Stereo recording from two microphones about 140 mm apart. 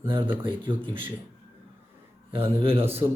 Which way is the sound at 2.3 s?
40° right (ahead or behind).